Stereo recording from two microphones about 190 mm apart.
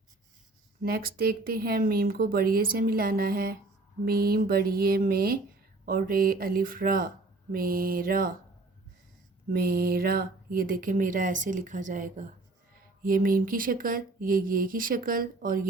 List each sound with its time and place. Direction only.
0.8 s speech: 50° right (ahead or behind)
9.5 s speech: 50° right (ahead or behind)